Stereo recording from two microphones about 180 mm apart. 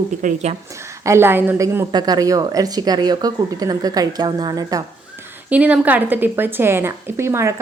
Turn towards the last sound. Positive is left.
turn(degrees=-15)  # may be behind; listen again after turning